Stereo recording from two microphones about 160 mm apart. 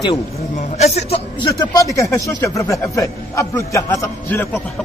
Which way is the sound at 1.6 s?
20° left (ahead or behind).